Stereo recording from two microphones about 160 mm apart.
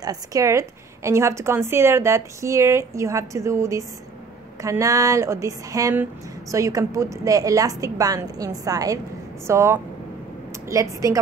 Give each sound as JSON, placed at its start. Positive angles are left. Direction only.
{"t": 0.0, "sound": "a woman's voice", "side_deg": -20}